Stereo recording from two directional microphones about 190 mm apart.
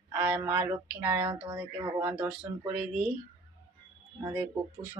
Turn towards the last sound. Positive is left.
turn(degrees=-10)  # may be behind; listen again after turning